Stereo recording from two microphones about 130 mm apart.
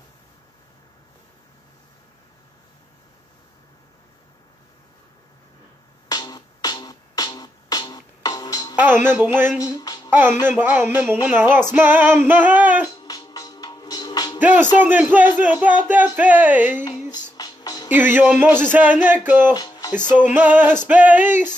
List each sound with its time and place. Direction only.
6.0 s music: 30° left (ahead or behind)
8.7 s female singing: 15° right (ahead or behind)
9.6 s music: 30° left (ahead or behind)
10.1 s female singing: 15° right (ahead or behind)
12.9 s music: 30° left (ahead or behind)
14.4 s speech: 15° right (ahead or behind)
14.8 s female singing: 15° right (ahead or behind)
16.8 s female singing: 30° left (ahead or behind)
17.4 s music: 30° left (ahead or behind)
17.9 s female singing: 15° right (ahead or behind)
19.5 s music: 30° left (ahead or behind)
20.3 s female singing: 15° right (ahead or behind)